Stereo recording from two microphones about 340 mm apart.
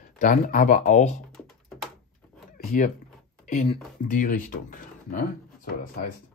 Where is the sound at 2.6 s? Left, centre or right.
Left.